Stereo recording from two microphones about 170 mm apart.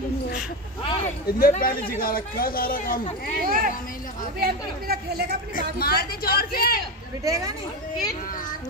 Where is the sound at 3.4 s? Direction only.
55° right (ahead or behind).